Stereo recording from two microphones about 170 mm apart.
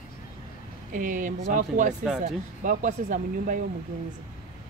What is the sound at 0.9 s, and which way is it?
Speech, 50° right (ahead or behind).